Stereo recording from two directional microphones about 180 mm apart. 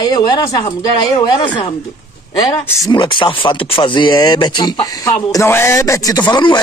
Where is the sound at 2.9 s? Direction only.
25° left (ahead or behind).